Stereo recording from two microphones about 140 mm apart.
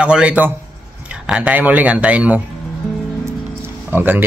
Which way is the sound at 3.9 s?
15° right (ahead or behind).